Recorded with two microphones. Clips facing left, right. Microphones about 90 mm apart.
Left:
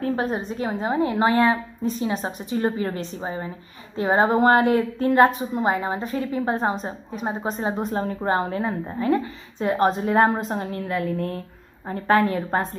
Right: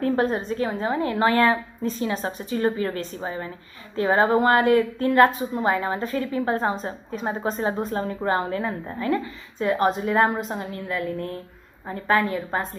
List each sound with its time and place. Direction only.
0.0 s a woman's voice: 10° left (ahead or behind)
0.6 s a woman's voice: 20° left (ahead or behind)
7.2 s a woman's voice: 15° left (ahead or behind); by 12.3 s 30° left (ahead or behind)
12.4 s a woman's voice: 40° left (ahead or behind)